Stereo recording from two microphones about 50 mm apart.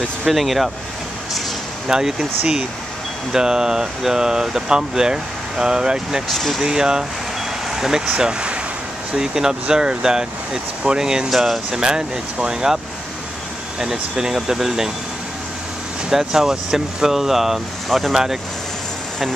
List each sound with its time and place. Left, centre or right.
0.3 s speech: centre
1.9 s speech: centre
3.3 s speech: centre
6.2 s speech: centre
6.6 s speech: centre
16.1 s speech: centre